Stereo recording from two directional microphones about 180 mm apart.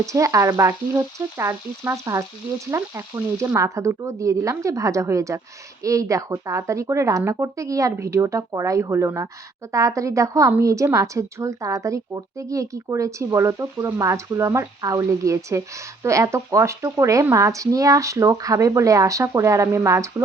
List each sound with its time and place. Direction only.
0.0 s a woman's voice: 15° right (ahead or behind)